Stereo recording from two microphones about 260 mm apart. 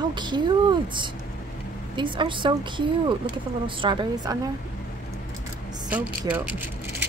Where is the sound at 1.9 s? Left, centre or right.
Centre.